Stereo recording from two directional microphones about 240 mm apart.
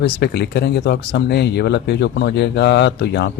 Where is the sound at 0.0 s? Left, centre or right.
Left.